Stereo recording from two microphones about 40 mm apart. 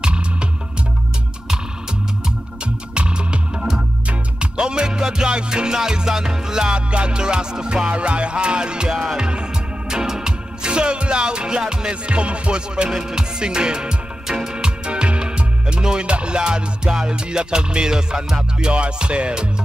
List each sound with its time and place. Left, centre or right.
0.0 s music: right
2.6 s music: right